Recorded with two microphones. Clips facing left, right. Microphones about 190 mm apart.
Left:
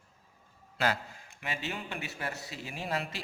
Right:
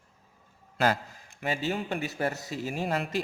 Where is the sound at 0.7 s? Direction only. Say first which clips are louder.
Right 5 dB; 45° right (ahead or behind).